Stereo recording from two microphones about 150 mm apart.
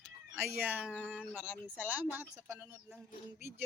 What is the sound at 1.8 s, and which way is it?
Speech, 10° right (ahead or behind).